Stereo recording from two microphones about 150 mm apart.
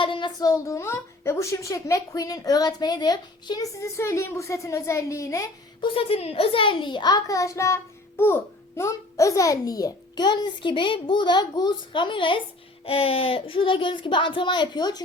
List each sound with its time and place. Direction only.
0.0 s a child's voice: 30° left (ahead or behind)
5.9 s a child's voice: 40° left (ahead or behind)